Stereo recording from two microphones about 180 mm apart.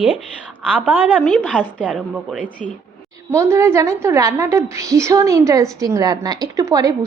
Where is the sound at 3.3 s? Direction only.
15° right (ahead or behind).